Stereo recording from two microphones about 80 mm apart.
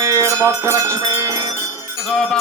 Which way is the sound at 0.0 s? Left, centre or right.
Right.